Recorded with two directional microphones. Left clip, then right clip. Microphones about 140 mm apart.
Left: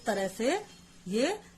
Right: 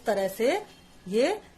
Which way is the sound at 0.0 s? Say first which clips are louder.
Right 5 dB; 25° left (ahead or behind).